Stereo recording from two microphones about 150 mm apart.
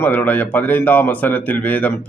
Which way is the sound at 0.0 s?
15° left (ahead or behind).